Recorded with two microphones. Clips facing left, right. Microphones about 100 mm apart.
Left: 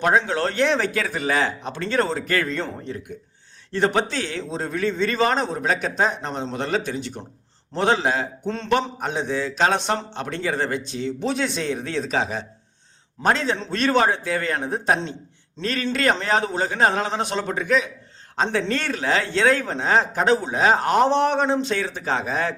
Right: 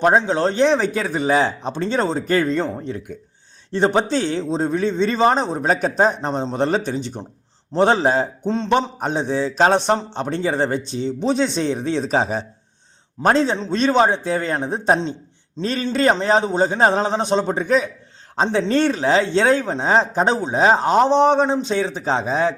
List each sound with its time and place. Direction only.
0.0 s a man's voice: 25° right (ahead or behind)
8.4 s a man's voice: 20° right (ahead or behind)
9.0 s a man's voice: 35° right (ahead or behind)
13.6 s a man's voice: 20° right (ahead or behind)